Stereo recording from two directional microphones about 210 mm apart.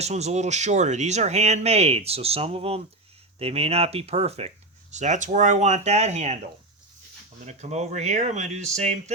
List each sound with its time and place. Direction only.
0.0 s speech: 30° right (ahead or behind)
7.4 s speech: 35° right (ahead or behind)